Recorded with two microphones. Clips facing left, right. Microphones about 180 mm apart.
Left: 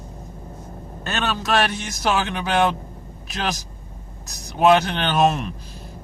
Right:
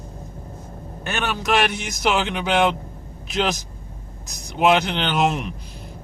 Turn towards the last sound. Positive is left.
turn(degrees=-15)  # may be behind; listen again after turning